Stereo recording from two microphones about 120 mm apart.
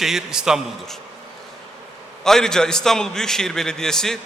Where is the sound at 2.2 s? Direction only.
5° left (ahead or behind).